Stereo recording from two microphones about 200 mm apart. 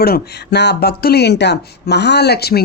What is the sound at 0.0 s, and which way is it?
Speech, 50° left (ahead or behind).